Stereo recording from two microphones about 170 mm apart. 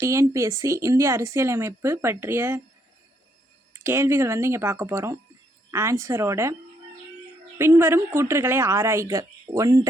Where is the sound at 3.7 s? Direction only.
15° right (ahead or behind).